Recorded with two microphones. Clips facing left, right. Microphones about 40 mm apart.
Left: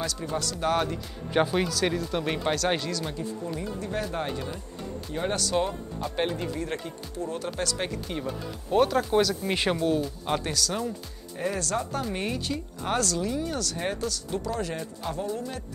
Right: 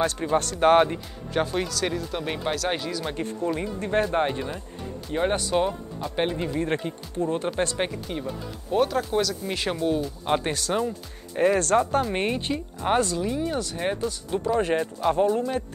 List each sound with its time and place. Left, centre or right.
0.0 s speech: right
1.3 s speech: centre
3.2 s speech: right
8.7 s speech: centre
10.4 s speech: right
11.3 s speech: right